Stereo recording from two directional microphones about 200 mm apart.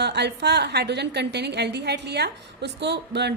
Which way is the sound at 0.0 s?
55° right (ahead or behind).